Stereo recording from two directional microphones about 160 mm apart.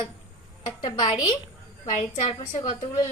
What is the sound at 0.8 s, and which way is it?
Speech, 30° left (ahead or behind).